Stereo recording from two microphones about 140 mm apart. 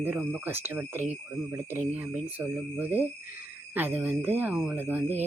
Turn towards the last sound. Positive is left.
turn(degrees=-10)  # may be behind; listen again after turning